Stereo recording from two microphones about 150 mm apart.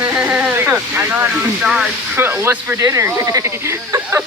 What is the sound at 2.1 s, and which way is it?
Speech, 15° right (ahead or behind).